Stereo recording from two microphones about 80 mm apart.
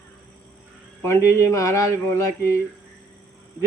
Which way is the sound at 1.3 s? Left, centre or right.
Left.